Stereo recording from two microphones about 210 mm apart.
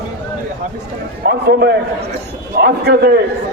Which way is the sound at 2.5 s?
50° right (ahead or behind).